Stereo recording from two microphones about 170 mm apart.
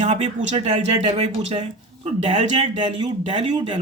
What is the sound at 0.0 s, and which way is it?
Speech, 45° right (ahead or behind).